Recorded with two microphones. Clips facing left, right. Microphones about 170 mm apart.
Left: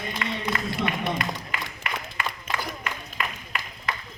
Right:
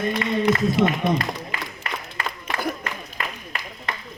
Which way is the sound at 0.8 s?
60° right (ahead or behind).